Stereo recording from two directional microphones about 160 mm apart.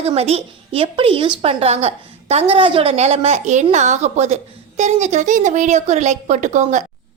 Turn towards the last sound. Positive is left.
turn(degrees=-50)  # may be behind; listen again after turning